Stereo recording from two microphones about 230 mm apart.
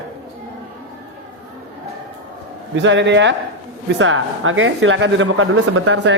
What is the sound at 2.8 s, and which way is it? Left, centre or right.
A man's voice, right.